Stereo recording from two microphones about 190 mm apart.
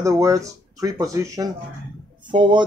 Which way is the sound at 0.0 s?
15° right (ahead or behind).